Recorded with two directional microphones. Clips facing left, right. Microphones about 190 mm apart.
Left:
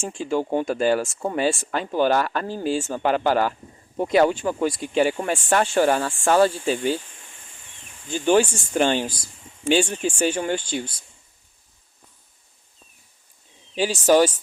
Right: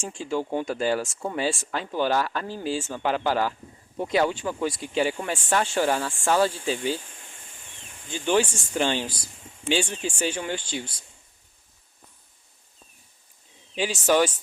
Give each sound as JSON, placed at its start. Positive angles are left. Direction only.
{"t": 0.0, "sound": "speech", "side_deg": 55}
{"t": 8.1, "sound": "speech", "side_deg": 45}
{"t": 13.7, "sound": "speech", "side_deg": 40}